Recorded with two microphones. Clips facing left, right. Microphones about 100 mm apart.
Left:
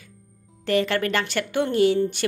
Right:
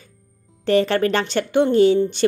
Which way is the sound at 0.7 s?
30° right (ahead or behind).